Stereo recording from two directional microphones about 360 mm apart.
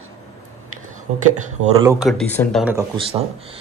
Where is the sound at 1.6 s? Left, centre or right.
Centre.